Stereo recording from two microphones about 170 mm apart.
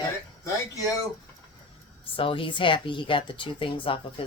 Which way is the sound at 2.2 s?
30° left (ahead or behind).